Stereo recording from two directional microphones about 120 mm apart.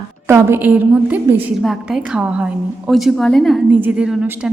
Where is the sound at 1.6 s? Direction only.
Centre (ahead or behind).